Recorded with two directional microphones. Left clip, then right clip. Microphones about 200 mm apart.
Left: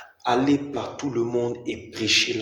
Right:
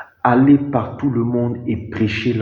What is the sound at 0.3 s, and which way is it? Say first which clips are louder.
A man's voice: right 8 dB; 40° left (ahead or behind).